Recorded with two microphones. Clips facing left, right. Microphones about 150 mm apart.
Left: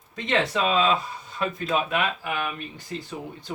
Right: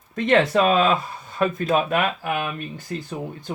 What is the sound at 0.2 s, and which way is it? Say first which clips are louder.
Speech: right 7 dB; 55° right (ahead or behind).